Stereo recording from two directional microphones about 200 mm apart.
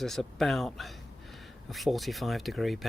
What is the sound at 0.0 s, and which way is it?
Speech, centre (ahead or behind).